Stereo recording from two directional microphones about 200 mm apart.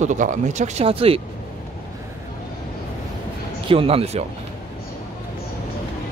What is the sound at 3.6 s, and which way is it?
Speech, 25° right (ahead or behind).